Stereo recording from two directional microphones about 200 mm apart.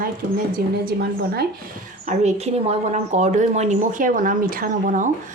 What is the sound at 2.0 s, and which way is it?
Speech, 35° right (ahead or behind).